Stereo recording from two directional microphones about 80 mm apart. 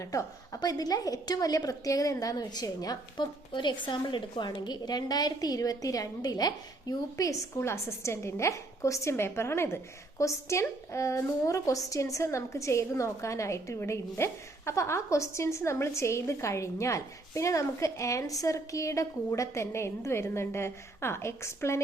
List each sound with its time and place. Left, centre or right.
0.0 s a woman's voice: left
7.5 s a woman's voice: left